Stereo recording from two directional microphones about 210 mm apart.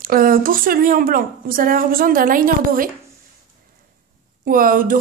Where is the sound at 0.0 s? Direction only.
40° right (ahead or behind).